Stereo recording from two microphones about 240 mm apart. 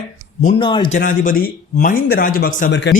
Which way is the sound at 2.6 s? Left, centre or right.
Left.